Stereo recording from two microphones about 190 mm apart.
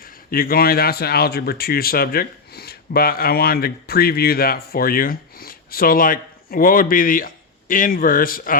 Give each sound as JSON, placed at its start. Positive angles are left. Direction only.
{"t": 0.3, "sound": "speech", "side_deg": 50}